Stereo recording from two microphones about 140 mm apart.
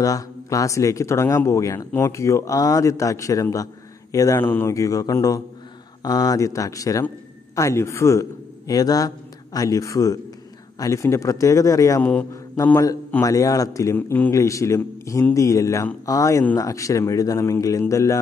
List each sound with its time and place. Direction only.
0.0 s a man's voice: 25° left (ahead or behind)
12.0 s a man's voice: 10° left (ahead or behind)